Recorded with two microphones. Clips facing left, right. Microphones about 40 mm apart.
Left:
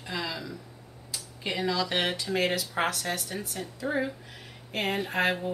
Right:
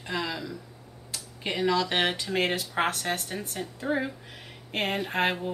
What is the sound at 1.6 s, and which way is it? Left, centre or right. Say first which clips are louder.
Speech: right 3 dB; right.